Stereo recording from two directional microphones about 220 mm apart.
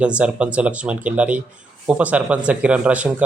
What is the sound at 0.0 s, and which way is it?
Speech, 5° right (ahead or behind).